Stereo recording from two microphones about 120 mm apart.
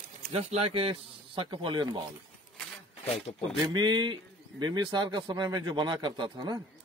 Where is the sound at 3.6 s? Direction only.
35° right (ahead or behind).